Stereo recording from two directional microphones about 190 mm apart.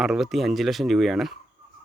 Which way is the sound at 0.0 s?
Centre (ahead or behind).